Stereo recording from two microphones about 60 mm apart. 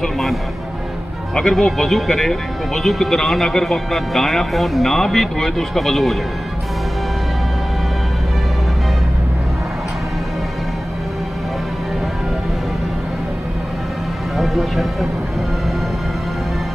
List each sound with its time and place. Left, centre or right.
0.0 s speech: centre
14.3 s speech: centre